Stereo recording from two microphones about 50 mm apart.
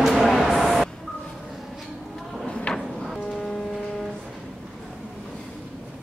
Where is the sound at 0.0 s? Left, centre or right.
Centre.